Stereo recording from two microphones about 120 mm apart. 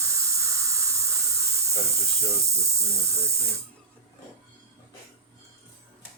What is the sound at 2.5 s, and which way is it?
Speech, 25° right (ahead or behind).